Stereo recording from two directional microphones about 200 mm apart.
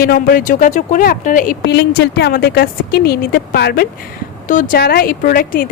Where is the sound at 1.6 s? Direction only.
60° left (ahead or behind).